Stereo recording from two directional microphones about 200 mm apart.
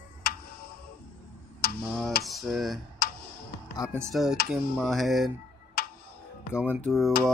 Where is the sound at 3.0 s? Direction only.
50° left (ahead or behind).